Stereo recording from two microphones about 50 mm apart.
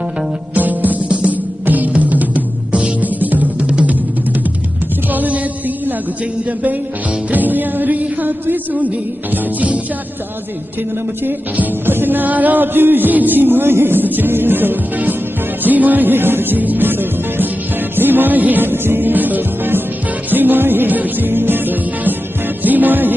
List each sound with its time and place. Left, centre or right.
0.5 s music: right
3.7 s music: right
5.1 s music: right
8.0 s a sound: right
9.3 s music: right
11.9 s music: right